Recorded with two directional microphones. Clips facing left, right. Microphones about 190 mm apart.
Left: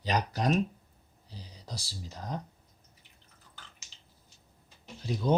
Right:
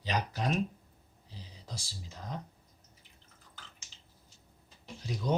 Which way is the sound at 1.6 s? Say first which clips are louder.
Left 3 dB; 35° left (ahead or behind).